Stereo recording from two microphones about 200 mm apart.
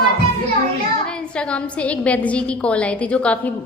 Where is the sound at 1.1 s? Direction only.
5° left (ahead or behind).